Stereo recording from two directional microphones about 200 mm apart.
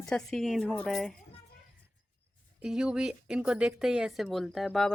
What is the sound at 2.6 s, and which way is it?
Speech, 5° right (ahead or behind).